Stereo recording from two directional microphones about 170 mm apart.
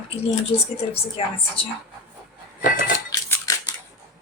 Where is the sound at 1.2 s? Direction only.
30° left (ahead or behind).